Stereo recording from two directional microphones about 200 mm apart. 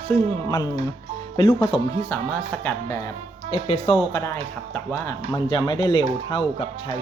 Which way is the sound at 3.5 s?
30° left (ahead or behind).